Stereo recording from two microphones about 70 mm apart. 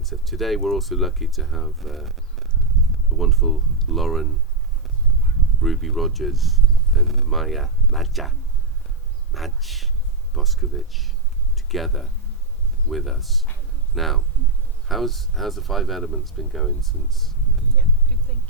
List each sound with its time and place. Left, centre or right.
0.0 s speech: centre
5.5 s speech: centre
18.3 s a sound: centre